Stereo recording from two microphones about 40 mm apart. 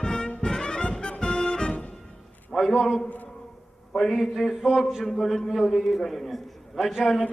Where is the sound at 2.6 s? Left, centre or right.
Centre.